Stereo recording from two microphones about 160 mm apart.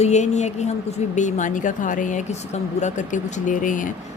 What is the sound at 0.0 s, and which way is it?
A woman's voice, 45° left (ahead or behind).